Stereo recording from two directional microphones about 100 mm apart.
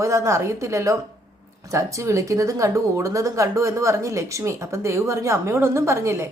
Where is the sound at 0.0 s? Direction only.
30° right (ahead or behind).